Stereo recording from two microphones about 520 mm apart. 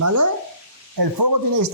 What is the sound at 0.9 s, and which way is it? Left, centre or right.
Speech, right.